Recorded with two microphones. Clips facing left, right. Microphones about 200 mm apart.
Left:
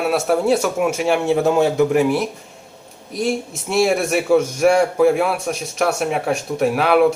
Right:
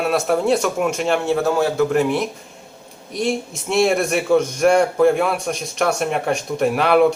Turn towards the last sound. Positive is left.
turn(degrees=0)  # may be behind; listen again after turning